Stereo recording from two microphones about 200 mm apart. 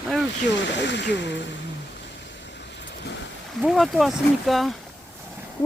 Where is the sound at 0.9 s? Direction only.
60° left (ahead or behind).